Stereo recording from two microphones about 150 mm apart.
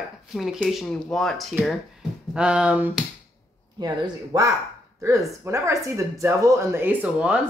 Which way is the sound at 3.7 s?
25° right (ahead or behind).